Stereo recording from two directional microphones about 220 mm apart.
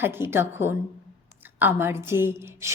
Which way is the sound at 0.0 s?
10° right (ahead or behind).